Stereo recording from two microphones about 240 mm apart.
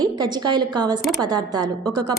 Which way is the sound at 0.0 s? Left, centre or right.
Centre.